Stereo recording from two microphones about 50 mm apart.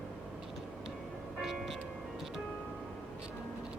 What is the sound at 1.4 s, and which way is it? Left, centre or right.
Music, centre.